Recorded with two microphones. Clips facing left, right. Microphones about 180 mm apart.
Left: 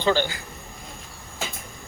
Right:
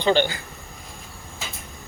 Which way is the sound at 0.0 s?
20° right (ahead or behind).